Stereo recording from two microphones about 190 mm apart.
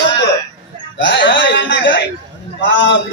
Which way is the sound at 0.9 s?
70° left (ahead or behind).